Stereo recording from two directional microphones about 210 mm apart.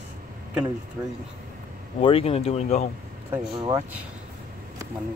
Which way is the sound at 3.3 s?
15° right (ahead or behind).